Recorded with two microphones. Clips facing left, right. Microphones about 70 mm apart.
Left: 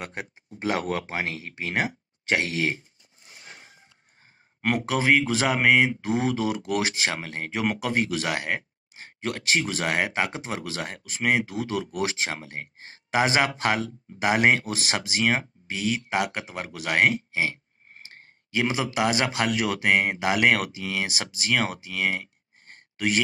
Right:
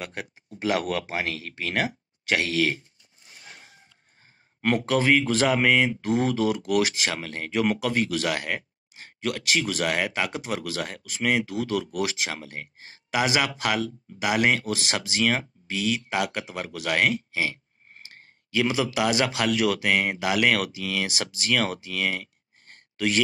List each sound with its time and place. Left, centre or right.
0.0 s speech: left
4.6 s speech: centre